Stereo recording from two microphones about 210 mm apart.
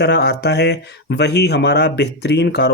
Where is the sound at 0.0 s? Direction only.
50° left (ahead or behind).